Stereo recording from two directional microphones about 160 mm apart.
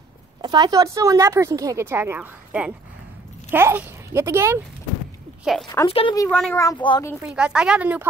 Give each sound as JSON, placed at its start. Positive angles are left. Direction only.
{"t": 0.4, "sound": "a woman's voice", "side_deg": -25}
{"t": 5.4, "sound": "speech", "side_deg": 0}
{"t": 5.9, "sound": "speech", "side_deg": 35}
{"t": 6.5, "sound": "speech", "side_deg": 20}
{"t": 7.3, "sound": "speech", "side_deg": -5}